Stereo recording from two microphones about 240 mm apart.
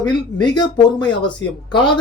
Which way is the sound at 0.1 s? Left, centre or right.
Centre.